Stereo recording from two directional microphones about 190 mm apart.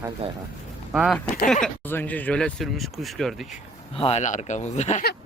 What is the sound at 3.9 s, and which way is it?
Speech, 35° left (ahead or behind).